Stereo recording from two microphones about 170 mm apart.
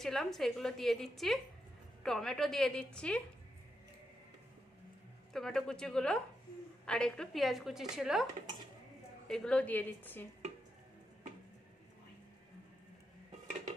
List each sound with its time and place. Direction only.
0.0 s a woman's voice: centre (ahead or behind)
5.3 s a woman's voice: centre (ahead or behind)
9.3 s a woman's voice: 5° left (ahead or behind)